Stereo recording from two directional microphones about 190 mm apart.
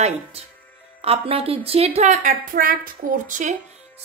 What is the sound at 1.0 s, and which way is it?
Speech, 30° right (ahead or behind).